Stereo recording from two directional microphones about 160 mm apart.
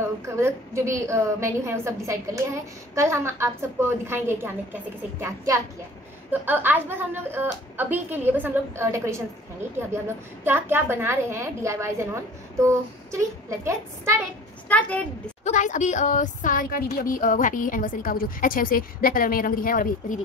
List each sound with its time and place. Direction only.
0.4 s a woman's voice: 20° right (ahead or behind)
10.4 s a woman's voice: 15° right (ahead or behind)
14.7 s a woman's voice: 10° left (ahead or behind)
15.4 s a woman's voice: 50° left (ahead or behind)